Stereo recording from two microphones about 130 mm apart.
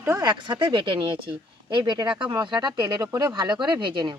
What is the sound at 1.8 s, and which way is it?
Speech, 25° right (ahead or behind).